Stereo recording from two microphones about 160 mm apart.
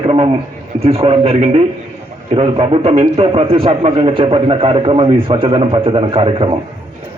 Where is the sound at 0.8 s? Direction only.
35° right (ahead or behind).